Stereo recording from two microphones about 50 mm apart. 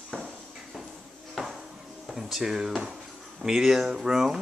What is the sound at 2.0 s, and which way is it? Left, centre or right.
Speech, centre.